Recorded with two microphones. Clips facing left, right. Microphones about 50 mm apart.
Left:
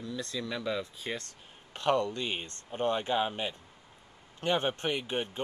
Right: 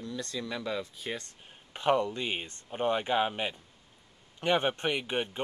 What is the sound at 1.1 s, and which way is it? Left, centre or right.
Speech, centre.